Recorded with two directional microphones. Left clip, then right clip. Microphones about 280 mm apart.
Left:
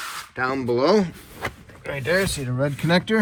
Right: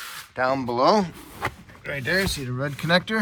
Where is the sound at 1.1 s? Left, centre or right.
Right.